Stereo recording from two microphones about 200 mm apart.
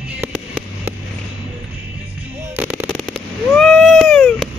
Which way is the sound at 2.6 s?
5° right (ahead or behind).